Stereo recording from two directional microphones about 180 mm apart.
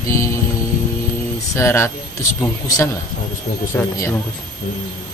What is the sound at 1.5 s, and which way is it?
Speech, 15° left (ahead or behind).